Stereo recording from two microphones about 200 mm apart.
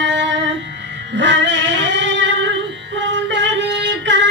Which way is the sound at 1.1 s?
65° right (ahead or behind).